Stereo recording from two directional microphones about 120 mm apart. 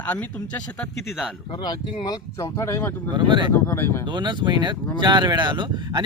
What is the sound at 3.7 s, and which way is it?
Speech, 20° left (ahead or behind).